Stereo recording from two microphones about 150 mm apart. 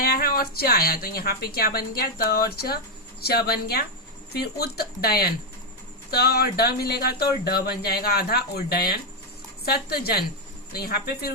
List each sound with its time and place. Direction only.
0.0 s speech: 90° left